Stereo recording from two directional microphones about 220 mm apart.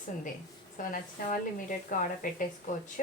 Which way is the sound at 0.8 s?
35° left (ahead or behind).